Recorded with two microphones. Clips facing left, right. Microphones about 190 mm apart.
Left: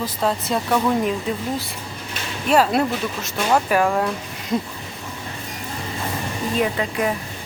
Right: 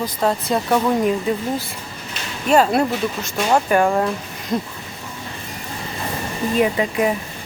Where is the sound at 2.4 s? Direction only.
Centre (ahead or behind).